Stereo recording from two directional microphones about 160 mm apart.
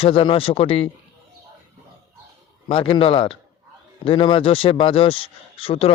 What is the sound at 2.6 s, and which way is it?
Speech, 35° left (ahead or behind).